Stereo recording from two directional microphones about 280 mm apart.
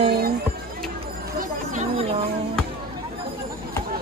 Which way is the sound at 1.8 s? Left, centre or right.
Right.